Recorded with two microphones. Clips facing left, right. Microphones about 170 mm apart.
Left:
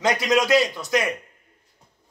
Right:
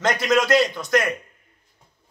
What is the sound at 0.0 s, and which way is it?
Speech, 10° left (ahead or behind).